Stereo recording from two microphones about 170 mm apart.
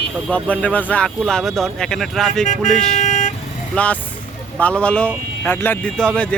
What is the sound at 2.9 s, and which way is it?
Vehicle, 45° left (ahead or behind).